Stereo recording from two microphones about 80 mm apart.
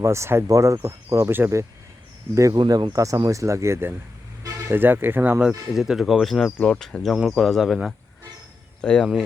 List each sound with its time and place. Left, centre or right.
0.0 s speech: right
2.3 s speech: right
2.6 s speech: right
5.5 s speech: centre
8.8 s speech: centre